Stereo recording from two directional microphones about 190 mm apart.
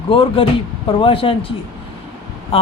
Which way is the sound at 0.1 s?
25° left (ahead or behind).